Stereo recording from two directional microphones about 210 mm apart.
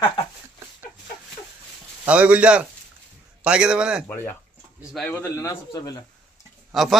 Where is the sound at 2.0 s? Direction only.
5° right (ahead or behind); by 6.0 s 20° left (ahead or behind).